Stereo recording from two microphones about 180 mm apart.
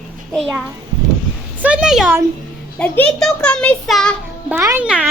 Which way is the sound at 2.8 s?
5° left (ahead or behind).